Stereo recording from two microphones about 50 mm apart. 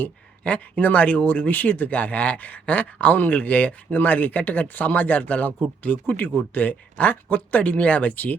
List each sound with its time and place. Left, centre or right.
0.0 s speech: left